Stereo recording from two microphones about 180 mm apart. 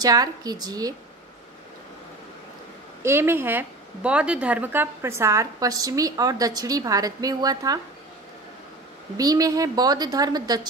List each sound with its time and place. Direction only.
0.0 s a woman's voice: 20° right (ahead or behind)
3.0 s a woman's voice: 15° right (ahead or behind)
9.1 s a woman's voice: 20° right (ahead or behind)